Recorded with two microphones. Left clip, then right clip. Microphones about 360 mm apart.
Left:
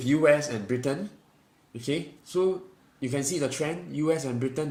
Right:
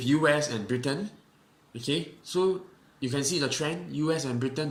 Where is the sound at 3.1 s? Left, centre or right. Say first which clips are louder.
Even; left.